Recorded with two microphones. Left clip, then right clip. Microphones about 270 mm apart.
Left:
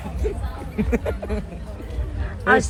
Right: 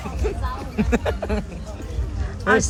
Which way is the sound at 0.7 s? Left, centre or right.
Centre.